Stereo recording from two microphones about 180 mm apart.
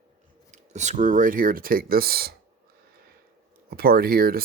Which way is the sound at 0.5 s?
40° right (ahead or behind).